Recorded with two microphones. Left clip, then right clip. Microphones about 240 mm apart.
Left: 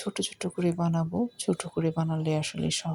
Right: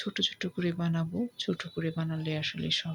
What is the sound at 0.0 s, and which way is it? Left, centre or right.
Speech, centre.